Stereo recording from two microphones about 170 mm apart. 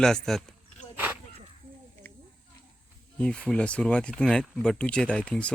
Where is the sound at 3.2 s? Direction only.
5° left (ahead or behind).